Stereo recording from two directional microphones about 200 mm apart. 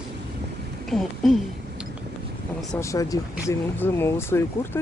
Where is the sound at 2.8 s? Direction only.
15° left (ahead or behind).